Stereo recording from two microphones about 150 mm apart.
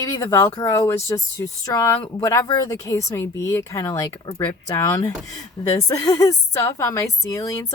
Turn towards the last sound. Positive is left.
turn(degrees=20)  # may be behind; listen again after turning